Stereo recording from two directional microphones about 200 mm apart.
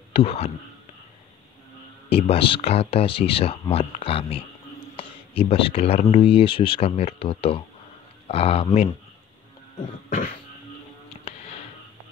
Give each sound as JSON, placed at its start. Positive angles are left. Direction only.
{"t": 0.1, "sound": "speech", "side_deg": 30}
{"t": 2.0, "sound": "speech", "side_deg": 30}
{"t": 10.0, "sound": "a sound", "side_deg": 30}